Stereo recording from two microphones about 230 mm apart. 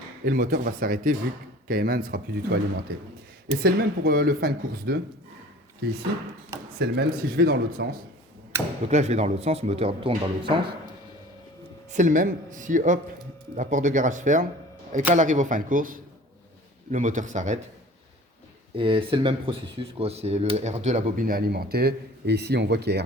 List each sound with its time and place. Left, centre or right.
0.3 s speech: right
6.7 s speech: right
8.9 s speech: right
11.9 s speech: right
18.8 s speech: right